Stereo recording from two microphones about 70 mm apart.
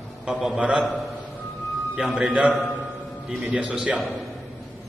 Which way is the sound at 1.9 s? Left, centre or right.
Centre.